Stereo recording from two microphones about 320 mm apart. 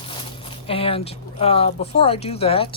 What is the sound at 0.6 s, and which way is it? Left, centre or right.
Speech, centre.